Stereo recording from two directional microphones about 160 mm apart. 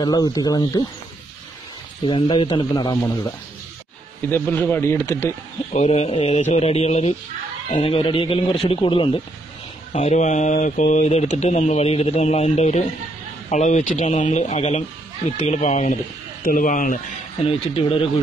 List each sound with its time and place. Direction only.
0.0 s speech: 25° left (ahead or behind)
2.0 s speech: 30° left (ahead or behind)
4.3 s speech: 10° left (ahead or behind)
5.7 s speech: 40° left (ahead or behind)
9.9 s speech: 45° left (ahead or behind)
17.5 s speech: 35° left (ahead or behind)